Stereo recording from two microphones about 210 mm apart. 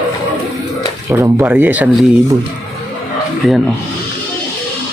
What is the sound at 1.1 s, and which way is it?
Speech, 10° right (ahead or behind).